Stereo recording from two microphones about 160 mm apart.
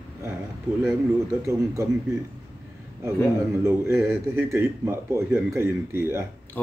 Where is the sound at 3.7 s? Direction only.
15° right (ahead or behind).